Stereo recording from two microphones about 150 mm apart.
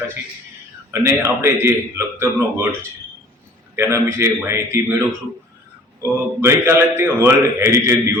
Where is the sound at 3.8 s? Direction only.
20° right (ahead or behind).